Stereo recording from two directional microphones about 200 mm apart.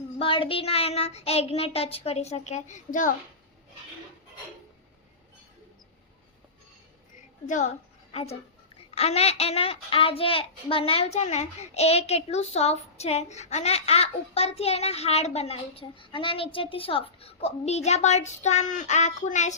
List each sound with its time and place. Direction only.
0.2 s a child's voice: 25° left (ahead or behind)
7.4 s a child's voice: 40° left (ahead or behind)